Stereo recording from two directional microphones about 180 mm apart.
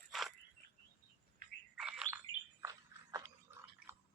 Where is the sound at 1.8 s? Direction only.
5° right (ahead or behind).